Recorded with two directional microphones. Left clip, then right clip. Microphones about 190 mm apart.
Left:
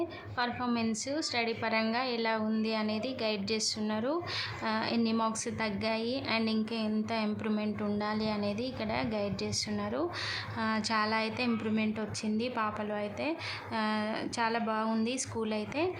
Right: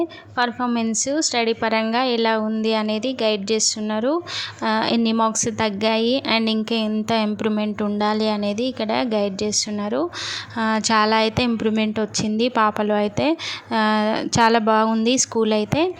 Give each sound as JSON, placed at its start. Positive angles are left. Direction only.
{"t": 0.3, "sound": "a woman's voice", "side_deg": -40}